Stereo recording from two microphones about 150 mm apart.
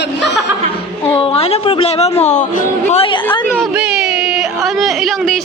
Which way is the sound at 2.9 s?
40° left (ahead or behind).